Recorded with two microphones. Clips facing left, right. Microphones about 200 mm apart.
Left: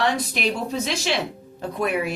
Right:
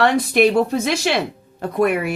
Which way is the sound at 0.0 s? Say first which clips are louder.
Right 8 dB; 60° right (ahead or behind).